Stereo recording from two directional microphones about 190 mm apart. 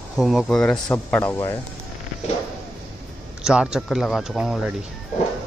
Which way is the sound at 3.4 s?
5° right (ahead or behind).